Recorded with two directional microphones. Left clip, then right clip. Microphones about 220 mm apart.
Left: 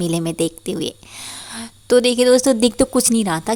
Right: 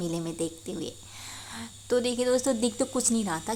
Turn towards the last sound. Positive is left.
turn(degrees=40)  # may be behind; listen again after turning